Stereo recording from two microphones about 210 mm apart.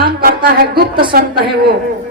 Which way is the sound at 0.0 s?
45° right (ahead or behind).